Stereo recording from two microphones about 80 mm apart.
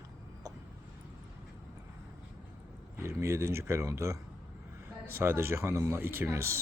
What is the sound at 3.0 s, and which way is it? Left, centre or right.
A man's voice, right.